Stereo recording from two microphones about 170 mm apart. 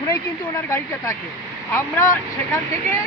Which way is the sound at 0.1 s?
20° left (ahead or behind).